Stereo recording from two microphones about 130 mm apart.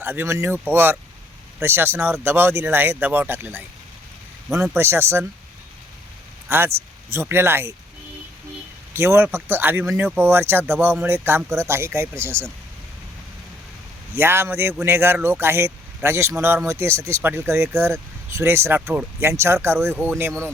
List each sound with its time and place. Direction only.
0.0 s speech: 15° right (ahead or behind)
6.7 s speech: 20° right (ahead or behind)
8.9 s speech: 20° right (ahead or behind)
14.2 s speech: 20° right (ahead or behind)